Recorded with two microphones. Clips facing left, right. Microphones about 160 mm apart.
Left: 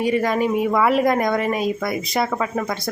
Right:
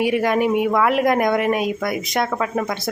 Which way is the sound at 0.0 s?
5° right (ahead or behind).